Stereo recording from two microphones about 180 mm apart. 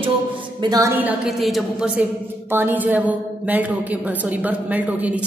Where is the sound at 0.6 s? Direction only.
20° right (ahead or behind).